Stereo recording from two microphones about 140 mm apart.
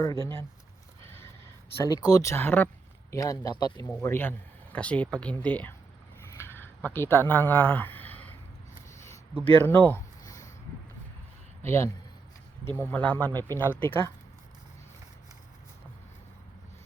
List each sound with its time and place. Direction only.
0.0 s speech: 25° left (ahead or behind)
1.8 s speech: 25° left (ahead or behind)
4.0 s speech: 15° left (ahead or behind)
6.3 s a sound: 15° left (ahead or behind)
9.4 s speech: 15° left (ahead or behind)
11.6 s a man's voice: 20° left (ahead or behind)